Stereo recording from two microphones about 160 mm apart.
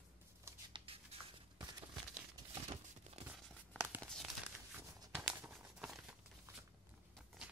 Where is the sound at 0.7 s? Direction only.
35° right (ahead or behind).